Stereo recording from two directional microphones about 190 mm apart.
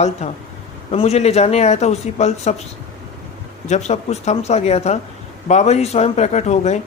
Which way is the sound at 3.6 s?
35° left (ahead or behind).